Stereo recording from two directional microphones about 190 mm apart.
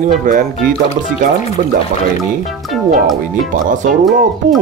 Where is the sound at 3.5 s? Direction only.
45° right (ahead or behind).